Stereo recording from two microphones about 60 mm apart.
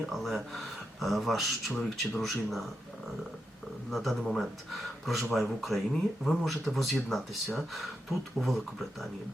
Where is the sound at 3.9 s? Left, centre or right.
Centre.